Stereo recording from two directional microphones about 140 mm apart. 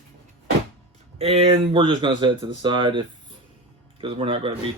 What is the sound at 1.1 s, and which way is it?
Speech, 45° right (ahead or behind).